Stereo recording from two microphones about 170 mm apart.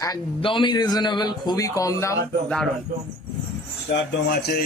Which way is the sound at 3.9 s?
85° left.